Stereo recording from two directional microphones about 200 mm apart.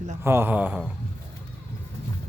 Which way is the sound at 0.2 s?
10° right (ahead or behind).